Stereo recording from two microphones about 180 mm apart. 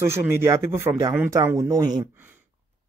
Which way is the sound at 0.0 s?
15° right (ahead or behind).